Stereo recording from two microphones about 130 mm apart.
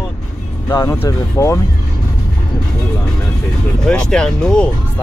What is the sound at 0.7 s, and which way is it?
Speech, 25° left (ahead or behind).